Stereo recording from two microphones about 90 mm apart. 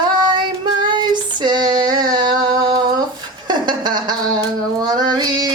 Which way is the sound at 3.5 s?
55° right (ahead or behind).